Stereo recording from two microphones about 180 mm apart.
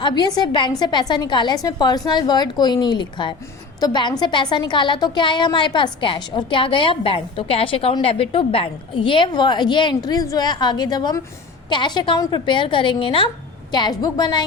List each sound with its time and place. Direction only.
0.0 s a woman's voice: 25° left (ahead or behind)